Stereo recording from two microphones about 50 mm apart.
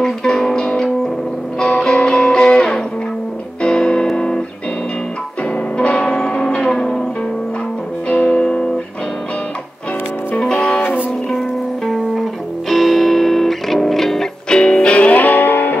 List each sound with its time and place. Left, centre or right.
0.0 s music: centre
5.8 s change ringing: centre
8.1 s music: left
10.4 s music: centre
11.2 s music: centre
14.6 s music: centre; by 15.8 s left